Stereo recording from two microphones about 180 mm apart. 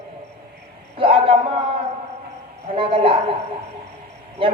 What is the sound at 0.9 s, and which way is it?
Speech, 30° right (ahead or behind).